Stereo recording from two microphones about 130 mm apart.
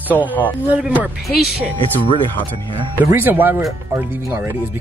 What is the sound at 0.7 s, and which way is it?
Speech, 10° right (ahead or behind).